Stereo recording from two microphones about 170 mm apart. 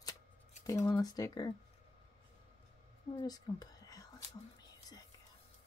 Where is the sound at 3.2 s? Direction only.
20° left (ahead or behind).